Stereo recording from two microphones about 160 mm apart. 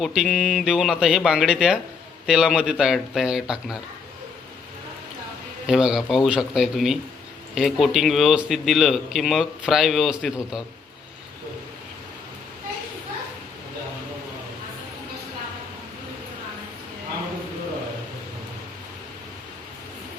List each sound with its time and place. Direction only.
0.0 s a man's voice: centre (ahead or behind)
5.6 s a man's voice: 5° right (ahead or behind)